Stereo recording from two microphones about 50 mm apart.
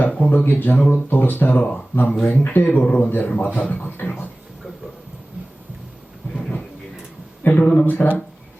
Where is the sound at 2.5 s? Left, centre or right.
Left.